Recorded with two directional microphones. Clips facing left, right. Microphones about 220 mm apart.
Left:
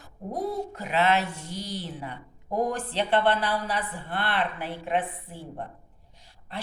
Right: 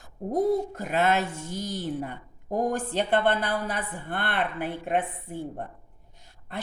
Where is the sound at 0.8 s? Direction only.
50° right (ahead or behind).